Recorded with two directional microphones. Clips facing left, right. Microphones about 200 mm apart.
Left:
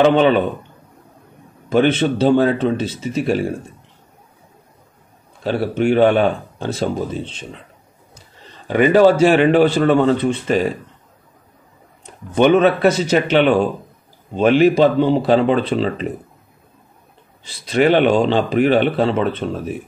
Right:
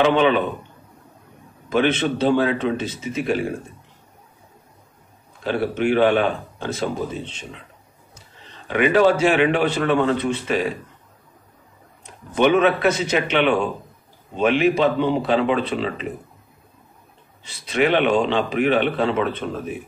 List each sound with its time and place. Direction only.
0.0 s a man's voice: 40° left (ahead or behind)
1.7 s a man's voice: 35° left (ahead or behind)
5.4 s a man's voice: 35° left (ahead or behind)
8.6 s a man's voice: 40° left (ahead or behind)
12.4 s a man's voice: 35° left (ahead or behind)
17.4 s a man's voice: 35° left (ahead or behind)